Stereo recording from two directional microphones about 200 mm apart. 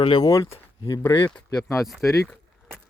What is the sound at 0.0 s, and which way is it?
Speech, 20° left (ahead or behind).